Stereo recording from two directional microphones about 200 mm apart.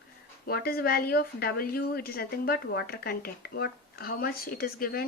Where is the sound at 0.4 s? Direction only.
50° left (ahead or behind).